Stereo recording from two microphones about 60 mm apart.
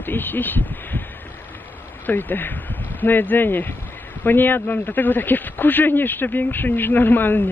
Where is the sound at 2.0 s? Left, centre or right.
Left.